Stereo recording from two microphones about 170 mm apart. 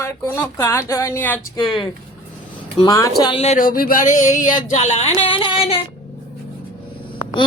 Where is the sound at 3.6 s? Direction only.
55° left (ahead or behind); by 5.2 s 40° left (ahead or behind).